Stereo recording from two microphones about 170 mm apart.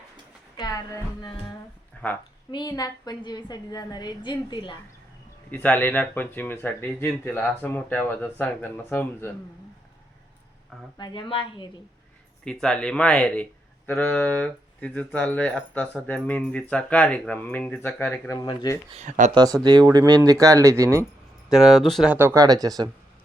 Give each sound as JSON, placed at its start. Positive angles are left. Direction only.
{"t": 0.5, "sound": "a woman's voice", "side_deg": 20}
{"t": 5.5, "sound": "speech", "side_deg": 10}
{"t": 10.9, "sound": "a woman's voice", "side_deg": 25}
{"t": 12.5, "sound": "speech", "side_deg": 5}
{"t": 18.3, "sound": "a woman's voice", "side_deg": 25}
{"t": 18.9, "sound": "speech", "side_deg": -45}
{"t": 19.3, "sound": "speech", "side_deg": -25}
{"t": 21.5, "sound": "speech", "side_deg": 0}
{"t": 22.1, "sound": "speech", "side_deg": -15}